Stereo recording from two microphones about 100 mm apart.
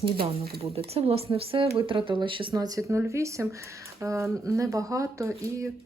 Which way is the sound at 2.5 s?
40° right (ahead or behind).